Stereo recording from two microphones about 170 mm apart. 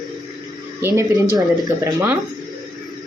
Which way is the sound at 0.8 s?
15° right (ahead or behind).